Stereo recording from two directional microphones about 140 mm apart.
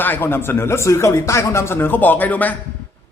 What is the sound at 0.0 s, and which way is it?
A man's voice, 15° left (ahead or behind).